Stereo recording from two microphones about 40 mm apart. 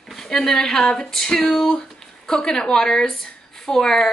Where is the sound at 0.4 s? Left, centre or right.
Centre.